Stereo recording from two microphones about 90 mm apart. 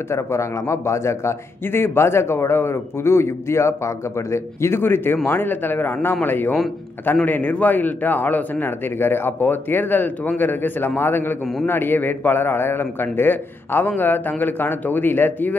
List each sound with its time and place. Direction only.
0.1 s a man's voice: 30° left (ahead or behind)